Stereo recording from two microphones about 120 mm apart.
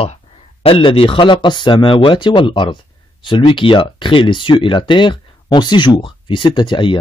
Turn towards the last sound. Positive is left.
turn(degrees=40)  # may be behind; listen again after turning